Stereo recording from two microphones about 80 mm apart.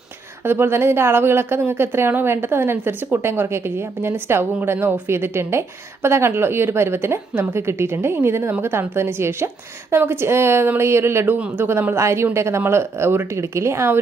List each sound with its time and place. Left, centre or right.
0.4 s a woman's voice: right
11.3 s a man's voice: centre
11.6 s a woman's voice: right